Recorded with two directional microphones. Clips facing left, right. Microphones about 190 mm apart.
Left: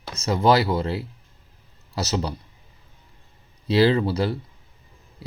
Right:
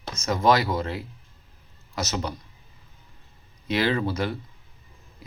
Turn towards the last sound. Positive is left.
turn(degrees=30)  # may be behind; listen again after turning